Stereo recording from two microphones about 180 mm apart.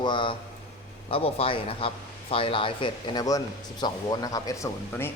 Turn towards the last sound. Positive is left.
turn(degrees=15)  # may be behind; listen again after turning